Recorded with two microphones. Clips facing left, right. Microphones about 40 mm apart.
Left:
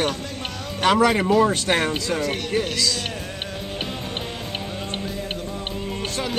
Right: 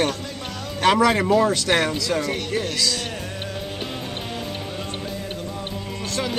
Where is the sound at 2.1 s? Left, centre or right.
Centre.